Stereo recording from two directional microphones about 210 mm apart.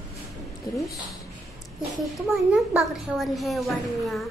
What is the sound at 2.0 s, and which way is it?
A child's voice, centre (ahead or behind).